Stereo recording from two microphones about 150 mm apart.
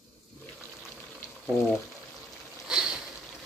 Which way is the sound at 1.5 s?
Centre (ahead or behind).